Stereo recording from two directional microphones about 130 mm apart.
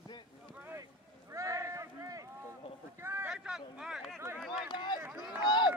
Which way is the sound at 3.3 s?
5° right (ahead or behind).